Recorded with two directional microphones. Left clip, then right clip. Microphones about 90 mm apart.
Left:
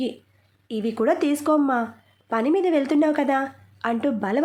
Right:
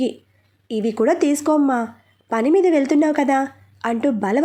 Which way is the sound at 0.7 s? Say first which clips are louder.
Right 4 dB; 35° right (ahead or behind).